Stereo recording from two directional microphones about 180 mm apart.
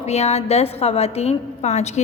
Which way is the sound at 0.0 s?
35° left (ahead or behind).